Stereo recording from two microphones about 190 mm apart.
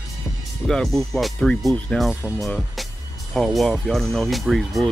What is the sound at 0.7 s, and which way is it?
Speech, centre (ahead or behind).